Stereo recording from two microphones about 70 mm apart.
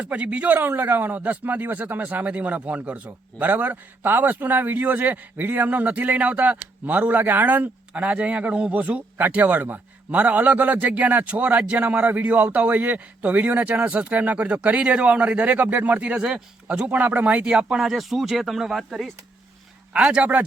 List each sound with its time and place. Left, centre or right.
0.0 s a man's voice: centre
19.9 s speech: centre